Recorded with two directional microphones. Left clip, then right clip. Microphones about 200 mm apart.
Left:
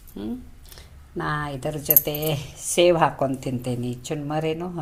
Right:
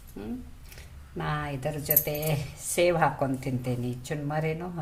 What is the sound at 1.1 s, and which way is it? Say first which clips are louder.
A woman's voice: left 5 dB; 30° left (ahead or behind).